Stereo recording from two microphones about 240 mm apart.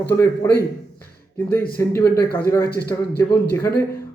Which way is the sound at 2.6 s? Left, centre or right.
Left.